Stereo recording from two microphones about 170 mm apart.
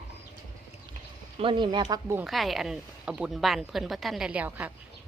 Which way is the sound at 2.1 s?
Centre (ahead or behind).